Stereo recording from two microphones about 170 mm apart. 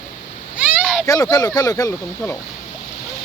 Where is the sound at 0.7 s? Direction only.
5° right (ahead or behind).